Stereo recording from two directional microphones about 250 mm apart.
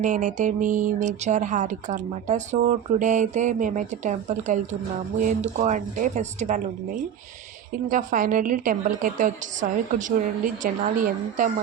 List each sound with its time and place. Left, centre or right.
0.0 s speech: right
7.9 s a woman's voice: right